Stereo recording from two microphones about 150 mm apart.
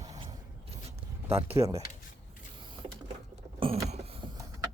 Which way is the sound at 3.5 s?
40° right (ahead or behind).